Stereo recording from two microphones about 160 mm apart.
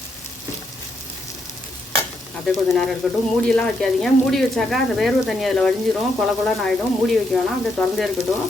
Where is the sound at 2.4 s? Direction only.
Centre (ahead or behind).